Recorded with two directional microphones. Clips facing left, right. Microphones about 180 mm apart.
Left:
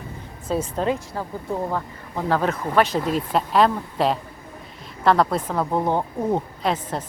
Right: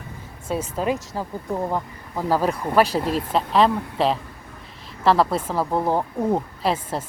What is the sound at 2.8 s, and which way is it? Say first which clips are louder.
Speech: right 1 dB; 35° right (ahead or behind).